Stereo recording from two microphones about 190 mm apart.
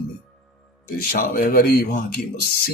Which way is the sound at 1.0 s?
50° left (ahead or behind).